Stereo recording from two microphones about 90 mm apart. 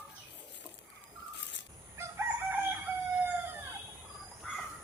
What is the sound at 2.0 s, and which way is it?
Crowing, 30° right (ahead or behind).